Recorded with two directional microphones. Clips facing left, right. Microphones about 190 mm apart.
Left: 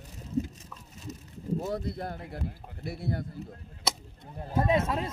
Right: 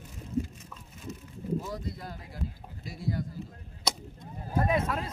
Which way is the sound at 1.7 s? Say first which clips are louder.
Left 5 dB; 60° left (ahead or behind).